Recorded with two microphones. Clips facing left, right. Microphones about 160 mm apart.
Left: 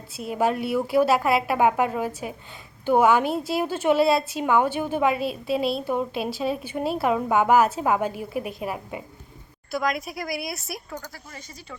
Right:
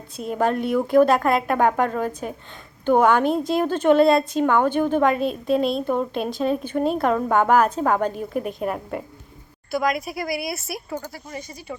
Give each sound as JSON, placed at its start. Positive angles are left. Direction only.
{"t": 0.2, "sound": "speech", "side_deg": 5}